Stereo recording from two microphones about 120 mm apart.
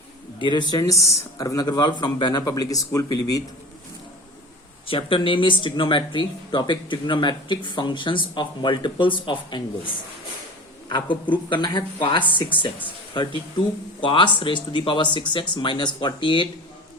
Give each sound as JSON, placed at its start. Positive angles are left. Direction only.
{"t": 0.3, "sound": "speech", "side_deg": 40}
{"t": 4.9, "sound": "speech", "side_deg": 50}